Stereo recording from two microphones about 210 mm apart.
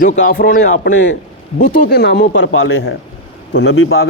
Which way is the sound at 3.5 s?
60° left (ahead or behind).